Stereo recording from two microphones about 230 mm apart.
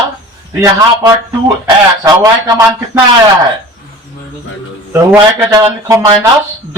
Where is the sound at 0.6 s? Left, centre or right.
Centre.